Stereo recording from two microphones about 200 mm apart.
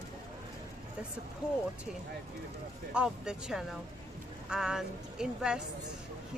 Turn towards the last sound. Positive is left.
turn(degrees=-5)  # may be behind; listen again after turning